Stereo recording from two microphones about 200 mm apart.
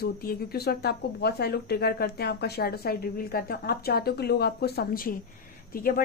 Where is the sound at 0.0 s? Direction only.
50° left (ahead or behind).